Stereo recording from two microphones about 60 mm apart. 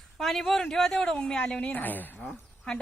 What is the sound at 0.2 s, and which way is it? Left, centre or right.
A woman's voice, centre.